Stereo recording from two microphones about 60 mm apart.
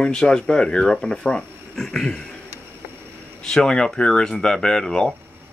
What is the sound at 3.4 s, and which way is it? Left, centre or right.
Speech, centre.